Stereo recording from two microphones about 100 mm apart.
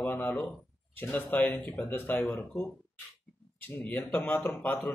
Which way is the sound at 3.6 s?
20° left (ahead or behind).